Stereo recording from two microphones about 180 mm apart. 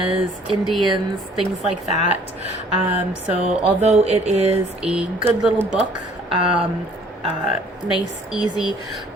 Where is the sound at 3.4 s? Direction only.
40° right (ahead or behind).